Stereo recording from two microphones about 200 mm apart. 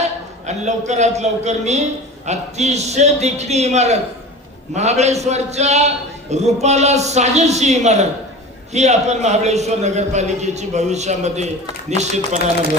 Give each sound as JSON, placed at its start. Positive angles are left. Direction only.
{"t": 0.0, "sound": "a man's voice", "side_deg": -35}